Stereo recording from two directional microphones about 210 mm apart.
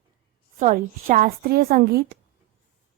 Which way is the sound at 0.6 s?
40° right (ahead or behind).